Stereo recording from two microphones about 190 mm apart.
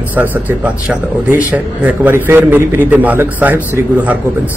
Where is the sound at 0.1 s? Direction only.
10° right (ahead or behind).